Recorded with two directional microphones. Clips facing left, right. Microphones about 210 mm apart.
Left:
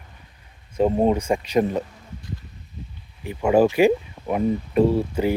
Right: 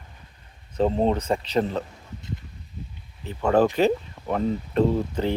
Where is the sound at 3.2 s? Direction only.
10° left (ahead or behind).